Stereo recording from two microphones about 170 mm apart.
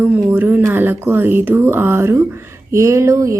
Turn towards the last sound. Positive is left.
turn(degrees=-20)  # may be behind; listen again after turning